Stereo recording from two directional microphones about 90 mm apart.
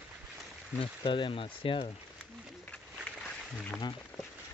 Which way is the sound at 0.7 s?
65° left (ahead or behind).